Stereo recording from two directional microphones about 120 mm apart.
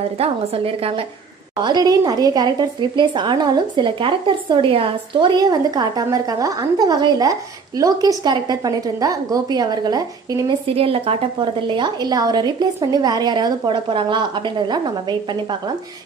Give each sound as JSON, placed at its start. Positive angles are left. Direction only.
{"t": 0.2, "sound": "a woman's voice", "side_deg": -50}
{"t": 1.6, "sound": "speech", "side_deg": -35}
{"t": 10.8, "sound": "speech", "side_deg": -50}